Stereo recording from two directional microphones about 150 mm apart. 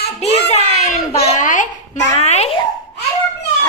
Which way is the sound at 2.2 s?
45° left (ahead or behind).